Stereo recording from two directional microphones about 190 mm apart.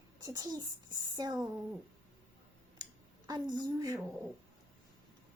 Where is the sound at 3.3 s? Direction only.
20° right (ahead or behind).